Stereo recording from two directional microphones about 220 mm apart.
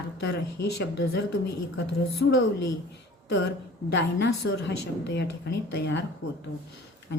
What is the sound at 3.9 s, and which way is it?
A woman's voice, 55° left (ahead or behind).